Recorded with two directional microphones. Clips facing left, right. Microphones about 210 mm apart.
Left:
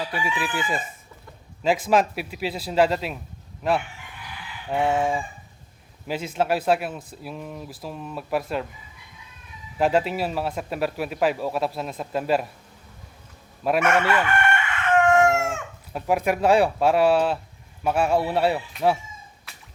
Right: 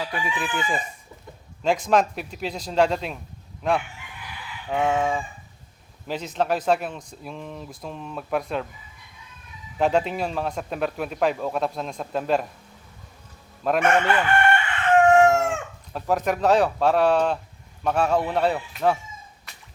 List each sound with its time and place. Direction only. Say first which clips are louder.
0.0 s a man's voice: left 1 dB; 5° left (ahead or behind)
4.7 s a man's voice: even; 10° left (ahead or behind)
9.7 s a man's voice: even; 5° left (ahead or behind)
13.6 s a man's voice: even; 10° left (ahead or behind)
14.1 s chicken: right 2 dB; 30° right (ahead or behind)
15.9 s a man's voice: left 1 dB; 10° left (ahead or behind)